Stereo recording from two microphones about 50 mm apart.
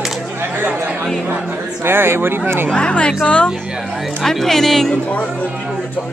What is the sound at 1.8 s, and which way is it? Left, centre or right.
Speech, right.